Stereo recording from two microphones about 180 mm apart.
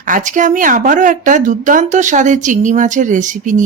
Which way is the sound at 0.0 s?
45° right (ahead or behind).